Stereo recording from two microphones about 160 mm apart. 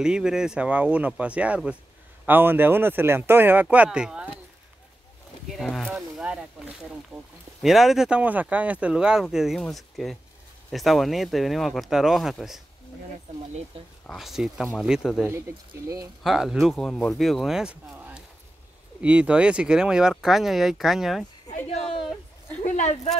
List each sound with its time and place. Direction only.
0.0 s speech: 5° right (ahead or behind)
5.6 s speech: centre (ahead or behind)
14.0 s speech: centre (ahead or behind)
15.2 s speech: 15° right (ahead or behind)
16.2 s speech: centre (ahead or behind)
21.5 s a sound: 40° left (ahead or behind)
22.6 s a sound: 50° left (ahead or behind)